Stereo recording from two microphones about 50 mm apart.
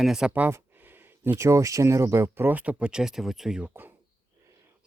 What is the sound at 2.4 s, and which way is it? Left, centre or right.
Speech, right.